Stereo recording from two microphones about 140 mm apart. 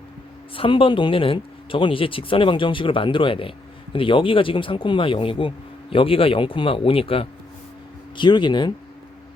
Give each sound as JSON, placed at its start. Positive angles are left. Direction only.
{"t": 0.5, "sound": "speech", "side_deg": 40}